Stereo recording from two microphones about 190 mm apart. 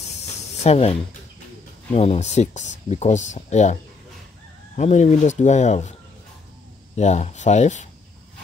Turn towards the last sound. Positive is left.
turn(degrees=40)  # may be behind; listen again after turning